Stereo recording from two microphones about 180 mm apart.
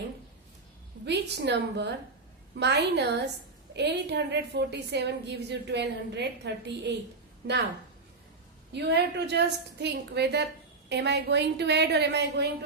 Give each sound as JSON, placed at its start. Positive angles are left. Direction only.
{"t": 1.0, "sound": "a woman's voice", "side_deg": -70}
{"t": 8.7, "sound": "a woman's voice", "side_deg": -70}